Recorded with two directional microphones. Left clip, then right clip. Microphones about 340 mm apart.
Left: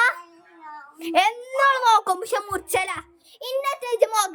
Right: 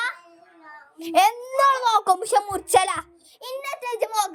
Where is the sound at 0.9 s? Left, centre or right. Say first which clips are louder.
Right 2 dB; centre.